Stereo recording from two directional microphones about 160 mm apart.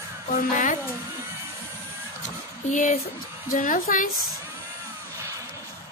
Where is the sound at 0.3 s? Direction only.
55° left (ahead or behind).